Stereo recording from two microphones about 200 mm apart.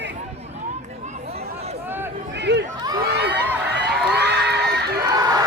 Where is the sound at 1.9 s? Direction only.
10° right (ahead or behind).